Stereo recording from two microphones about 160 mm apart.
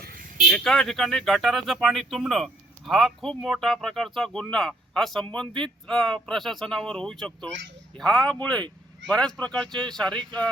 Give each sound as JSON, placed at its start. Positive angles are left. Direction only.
{"t": 0.5, "sound": "speech", "side_deg": 5}